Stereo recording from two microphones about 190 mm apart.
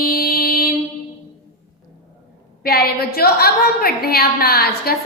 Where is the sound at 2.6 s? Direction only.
55° left (ahead or behind).